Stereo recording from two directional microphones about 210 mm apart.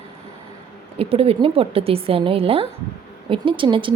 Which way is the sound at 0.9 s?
25° right (ahead or behind).